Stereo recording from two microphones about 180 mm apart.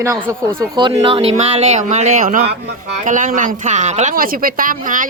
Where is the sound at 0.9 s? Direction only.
30° right (ahead or behind).